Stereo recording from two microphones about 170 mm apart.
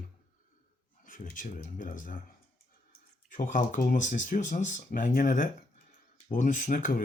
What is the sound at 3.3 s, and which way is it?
Speech, 50° left (ahead or behind).